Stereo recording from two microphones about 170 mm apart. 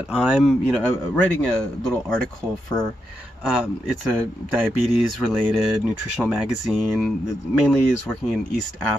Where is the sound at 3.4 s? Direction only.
5° right (ahead or behind).